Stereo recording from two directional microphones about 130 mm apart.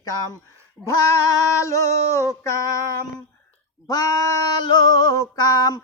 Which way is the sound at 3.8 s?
25° left (ahead or behind).